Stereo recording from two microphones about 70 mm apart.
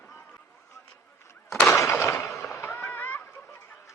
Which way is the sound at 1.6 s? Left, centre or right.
Left.